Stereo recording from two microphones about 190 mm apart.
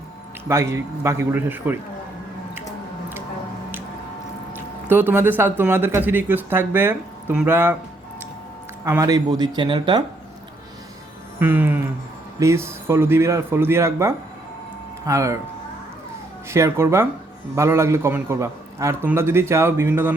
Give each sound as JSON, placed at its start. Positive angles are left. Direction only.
{"t": 0.4, "sound": "speech", "side_deg": -15}
{"t": 4.9, "sound": "speech", "side_deg": -10}
{"t": 8.8, "sound": "speech", "side_deg": -15}
{"t": 11.3, "sound": "speech", "side_deg": -10}
{"t": 16.5, "sound": "speech", "side_deg": -15}